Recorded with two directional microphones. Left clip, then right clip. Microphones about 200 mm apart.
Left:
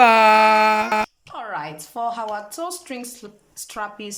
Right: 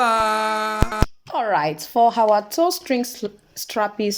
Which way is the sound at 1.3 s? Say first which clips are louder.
Right 11 dB; 30° right (ahead or behind).